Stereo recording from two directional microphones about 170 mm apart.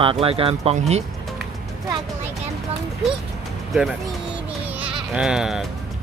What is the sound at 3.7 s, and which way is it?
Speech, centre (ahead or behind).